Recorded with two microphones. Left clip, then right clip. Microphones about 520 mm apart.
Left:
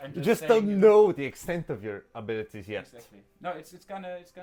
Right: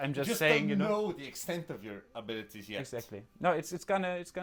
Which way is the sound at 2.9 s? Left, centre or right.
Right.